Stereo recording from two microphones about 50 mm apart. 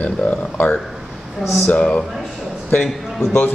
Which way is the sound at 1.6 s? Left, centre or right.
Left.